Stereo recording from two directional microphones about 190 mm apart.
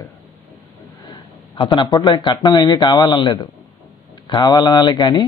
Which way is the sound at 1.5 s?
25° left (ahead or behind).